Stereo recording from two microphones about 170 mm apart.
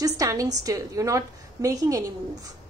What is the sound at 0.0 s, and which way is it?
A woman's voice, 20° right (ahead or behind).